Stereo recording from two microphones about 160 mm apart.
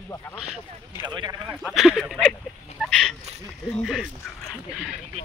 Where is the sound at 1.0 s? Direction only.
30° right (ahead or behind).